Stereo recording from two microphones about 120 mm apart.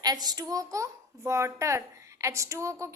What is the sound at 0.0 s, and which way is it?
A child's voice, 35° right (ahead or behind).